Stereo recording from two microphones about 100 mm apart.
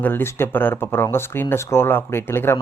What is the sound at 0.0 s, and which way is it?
Speech, 20° left (ahead or behind).